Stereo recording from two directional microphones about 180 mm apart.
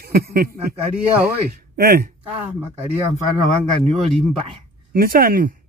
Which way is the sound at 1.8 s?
55° right (ahead or behind).